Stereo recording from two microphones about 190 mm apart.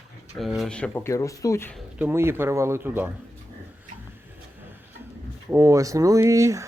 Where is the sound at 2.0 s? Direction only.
10° right (ahead or behind).